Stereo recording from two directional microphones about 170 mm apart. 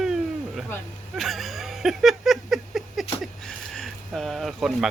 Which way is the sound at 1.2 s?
Centre (ahead or behind).